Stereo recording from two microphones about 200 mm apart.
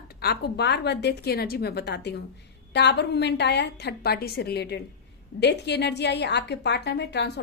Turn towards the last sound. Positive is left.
turn(degrees=55)  # may be behind; listen again after turning